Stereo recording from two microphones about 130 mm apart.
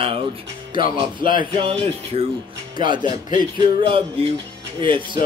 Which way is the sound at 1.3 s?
40° right (ahead or behind).